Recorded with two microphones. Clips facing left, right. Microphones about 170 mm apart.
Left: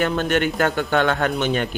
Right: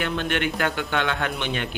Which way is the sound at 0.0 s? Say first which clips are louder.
Left 5 dB; 45° left (ahead or behind).